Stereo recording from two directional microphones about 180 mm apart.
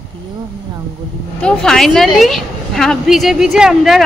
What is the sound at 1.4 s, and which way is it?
A woman's voice, 5° left (ahead or behind).